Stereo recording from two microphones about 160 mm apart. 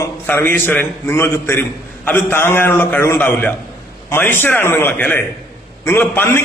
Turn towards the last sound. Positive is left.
turn(degrees=15)  # may be behind; listen again after turning